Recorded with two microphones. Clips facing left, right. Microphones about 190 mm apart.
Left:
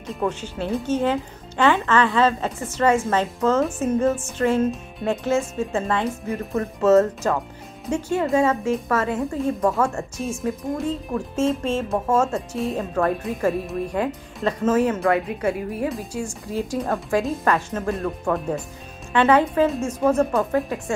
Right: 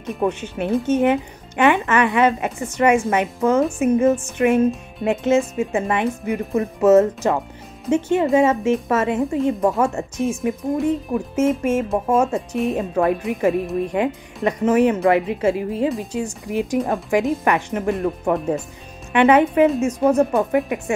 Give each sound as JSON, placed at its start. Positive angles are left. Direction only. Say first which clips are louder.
{"t": 0.1, "sound": "a woman's voice", "louder": "right 4 dB", "side_deg": -20}